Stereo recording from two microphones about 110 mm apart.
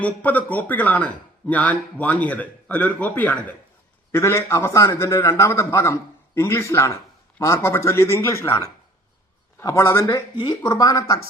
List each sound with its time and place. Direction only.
0.0 s speech: 15° left (ahead or behind)
4.1 s a man's voice: 25° left (ahead or behind)
9.6 s speech: 25° left (ahead or behind)